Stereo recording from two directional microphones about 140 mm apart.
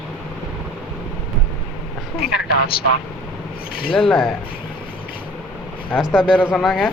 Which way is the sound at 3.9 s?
40° left (ahead or behind).